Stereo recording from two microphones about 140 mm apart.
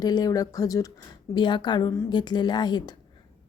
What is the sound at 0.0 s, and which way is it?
A woman's voice, 30° left (ahead or behind).